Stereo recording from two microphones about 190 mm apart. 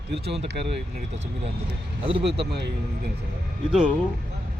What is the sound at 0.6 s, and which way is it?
Speech, 30° right (ahead or behind).